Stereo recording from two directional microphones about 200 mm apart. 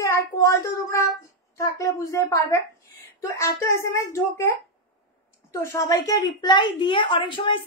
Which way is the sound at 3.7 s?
15° left (ahead or behind).